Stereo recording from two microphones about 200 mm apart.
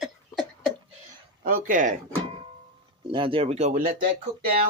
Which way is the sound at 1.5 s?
45° right (ahead or behind).